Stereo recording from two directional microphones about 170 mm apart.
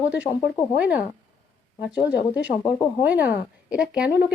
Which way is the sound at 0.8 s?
5° right (ahead or behind).